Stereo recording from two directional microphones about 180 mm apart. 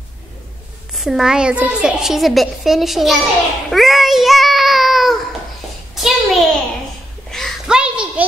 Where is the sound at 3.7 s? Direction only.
Centre (ahead or behind).